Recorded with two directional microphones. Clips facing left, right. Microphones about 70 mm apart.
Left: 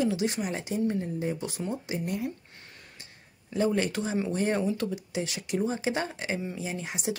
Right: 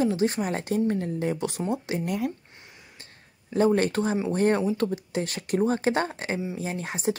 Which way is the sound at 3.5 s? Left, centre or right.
Right.